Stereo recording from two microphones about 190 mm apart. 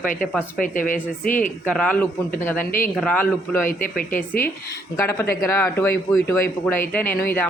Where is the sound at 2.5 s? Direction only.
45° left (ahead or behind).